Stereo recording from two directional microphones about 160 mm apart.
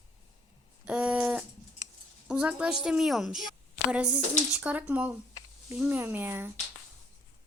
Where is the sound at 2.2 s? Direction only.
5° right (ahead or behind).